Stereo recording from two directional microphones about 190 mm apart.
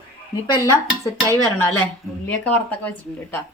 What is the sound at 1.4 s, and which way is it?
Speech, 10° left (ahead or behind).